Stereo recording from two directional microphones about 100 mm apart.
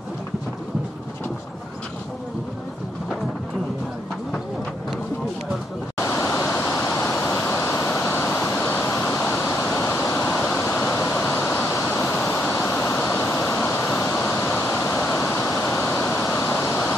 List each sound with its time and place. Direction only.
5.9 s a sound: 30° left (ahead or behind)
6.8 s vehicle: 20° left (ahead or behind)
9.3 s waterfall: 25° left (ahead or behind)
10.6 s waves: 20° left (ahead or behind)